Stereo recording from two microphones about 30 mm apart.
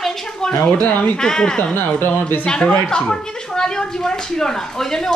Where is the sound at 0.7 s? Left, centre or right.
Left.